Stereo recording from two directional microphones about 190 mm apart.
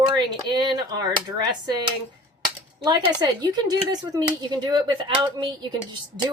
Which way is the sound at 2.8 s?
20° right (ahead or behind).